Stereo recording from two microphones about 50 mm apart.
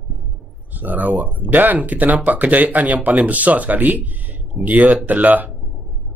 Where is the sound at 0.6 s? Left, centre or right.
Right.